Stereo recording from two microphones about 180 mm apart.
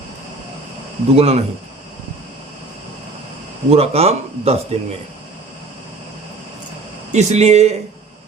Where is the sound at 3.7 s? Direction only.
35° right (ahead or behind).